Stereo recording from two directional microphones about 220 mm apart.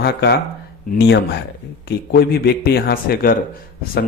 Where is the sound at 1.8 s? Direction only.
45° left (ahead or behind).